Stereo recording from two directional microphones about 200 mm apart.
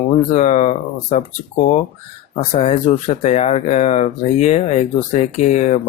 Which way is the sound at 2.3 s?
30° left (ahead or behind).